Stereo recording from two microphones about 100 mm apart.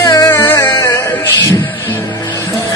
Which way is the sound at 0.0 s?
30° left (ahead or behind).